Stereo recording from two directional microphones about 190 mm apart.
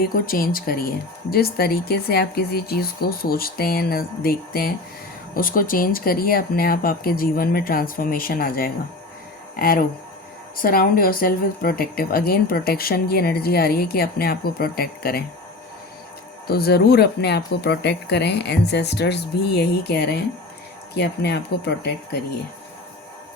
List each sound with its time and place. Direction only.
0.0 s speech: 50° left (ahead or behind)
16.5 s speech: 55° left (ahead or behind)